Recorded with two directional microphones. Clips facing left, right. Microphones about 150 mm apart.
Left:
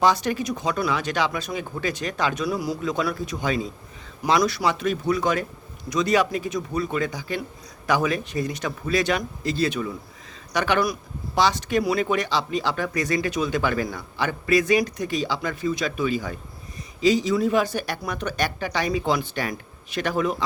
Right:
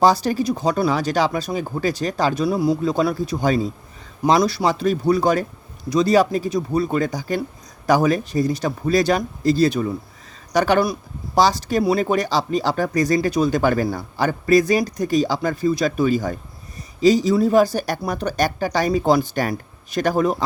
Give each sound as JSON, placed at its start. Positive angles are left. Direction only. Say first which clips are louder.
{"t": 0.0, "sound": "speech", "louder": "right 5 dB", "side_deg": -35}